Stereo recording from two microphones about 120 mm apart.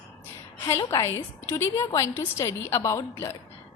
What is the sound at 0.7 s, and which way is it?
A woman's voice, 25° left (ahead or behind).